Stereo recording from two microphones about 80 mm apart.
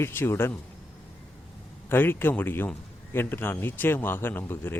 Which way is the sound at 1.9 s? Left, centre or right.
Left.